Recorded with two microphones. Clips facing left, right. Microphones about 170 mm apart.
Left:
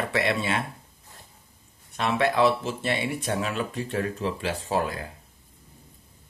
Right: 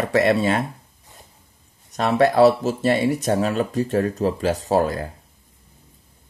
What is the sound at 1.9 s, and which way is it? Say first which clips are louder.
Speech: right 7 dB; 40° right (ahead or behind).